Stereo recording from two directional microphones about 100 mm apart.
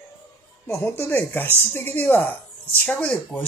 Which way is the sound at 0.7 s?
25° left (ahead or behind).